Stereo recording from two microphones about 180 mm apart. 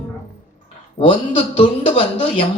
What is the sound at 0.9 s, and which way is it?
A man's voice, 30° left (ahead or behind).